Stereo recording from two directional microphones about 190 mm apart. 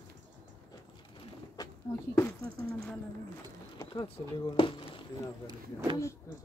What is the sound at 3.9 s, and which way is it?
Speech, 25° left (ahead or behind).